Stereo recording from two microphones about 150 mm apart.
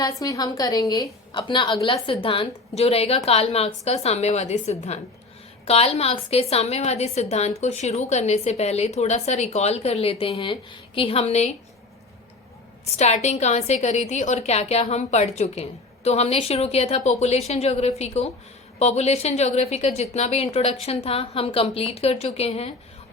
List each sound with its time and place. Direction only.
0.2 s a woman's voice: 25° left (ahead or behind); by 11.5 s 45° left (ahead or behind)
12.8 s a woman's voice: 50° left (ahead or behind)